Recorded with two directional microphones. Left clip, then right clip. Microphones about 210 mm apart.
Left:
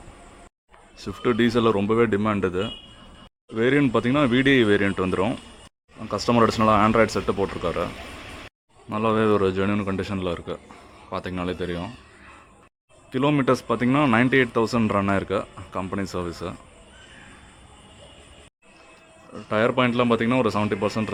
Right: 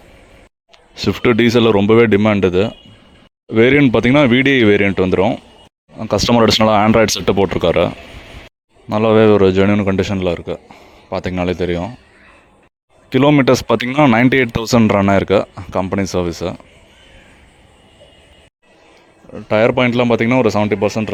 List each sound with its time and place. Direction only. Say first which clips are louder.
0.9 s speech: right 9 dB; 40° right (ahead or behind)
6.0 s speech: right 7 dB; 40° right (ahead or behind)
8.9 s speech: right 10 dB; 35° right (ahead or behind)
13.1 s speech: right 10 dB; 40° right (ahead or behind)
19.3 s speech: right 9 dB; 35° right (ahead or behind)